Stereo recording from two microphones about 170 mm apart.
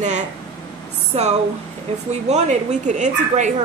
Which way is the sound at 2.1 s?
40° right (ahead or behind).